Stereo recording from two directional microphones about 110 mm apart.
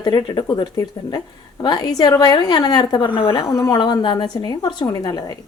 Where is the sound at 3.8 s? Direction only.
45° left (ahead or behind).